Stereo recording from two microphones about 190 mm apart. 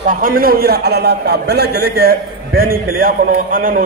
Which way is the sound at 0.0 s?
45° right (ahead or behind).